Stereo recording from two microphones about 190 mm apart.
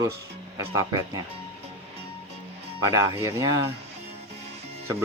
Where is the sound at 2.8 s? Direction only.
15° right (ahead or behind).